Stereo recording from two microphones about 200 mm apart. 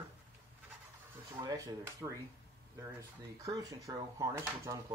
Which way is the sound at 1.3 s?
15° right (ahead or behind).